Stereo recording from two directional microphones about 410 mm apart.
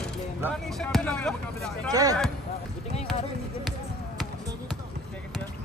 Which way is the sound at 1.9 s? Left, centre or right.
Centre.